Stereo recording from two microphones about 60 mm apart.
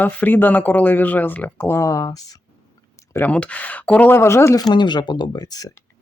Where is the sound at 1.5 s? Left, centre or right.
Left.